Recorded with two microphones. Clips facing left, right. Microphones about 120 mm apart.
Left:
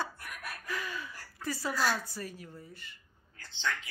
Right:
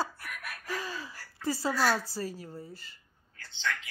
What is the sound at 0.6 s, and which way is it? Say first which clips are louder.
A woman's voice: right 2 dB; 35° right (ahead or behind).